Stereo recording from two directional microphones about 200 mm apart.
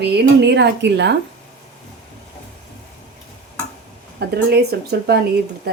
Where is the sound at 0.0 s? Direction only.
55° right (ahead or behind).